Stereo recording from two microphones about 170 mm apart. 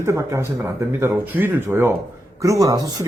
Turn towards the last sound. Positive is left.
turn(degrees=-20)  # may be behind; listen again after turning